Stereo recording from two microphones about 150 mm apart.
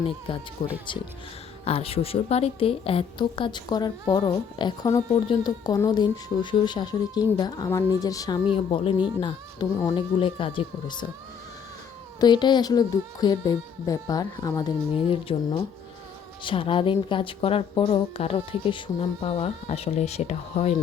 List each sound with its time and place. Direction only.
0.3 s speech: 35° left (ahead or behind)
8.5 s speech: 40° left (ahead or behind)
12.2 s speech: 30° left (ahead or behind)
15.0 s speech: 40° left (ahead or behind)